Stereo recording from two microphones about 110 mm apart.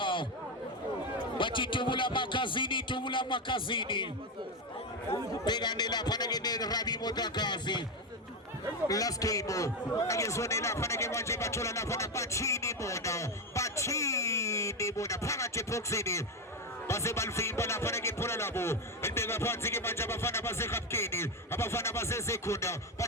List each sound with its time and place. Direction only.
0.0 s chatter: 50° left (ahead or behind)
1.4 s a man's voice: 50° left (ahead or behind)
5.5 s a man's voice: 40° left (ahead or behind)
8.9 s a man's voice: 35° left (ahead or behind)